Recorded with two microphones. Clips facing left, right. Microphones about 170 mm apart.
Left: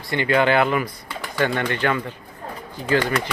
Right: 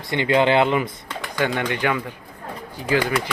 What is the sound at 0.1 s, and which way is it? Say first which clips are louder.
Speech: right 1 dB; 20° right (ahead or behind).